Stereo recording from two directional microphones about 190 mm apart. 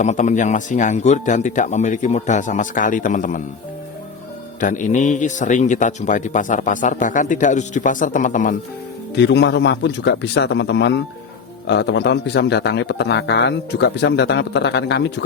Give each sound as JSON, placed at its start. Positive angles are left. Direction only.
{"t": 0.0, "sound": "a man's voice", "side_deg": 40}
{"t": 4.6, "sound": "a man's voice", "side_deg": 40}
{"t": 9.1, "sound": "a man's voice", "side_deg": 65}